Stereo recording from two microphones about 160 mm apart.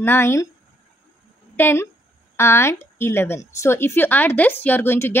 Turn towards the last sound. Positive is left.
turn(degrees=15)  # may be behind; listen again after turning